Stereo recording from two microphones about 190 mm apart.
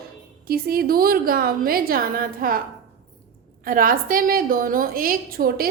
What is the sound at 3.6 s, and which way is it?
A woman's voice, 50° right (ahead or behind).